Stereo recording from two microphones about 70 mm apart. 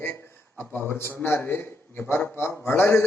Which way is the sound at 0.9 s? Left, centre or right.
Left.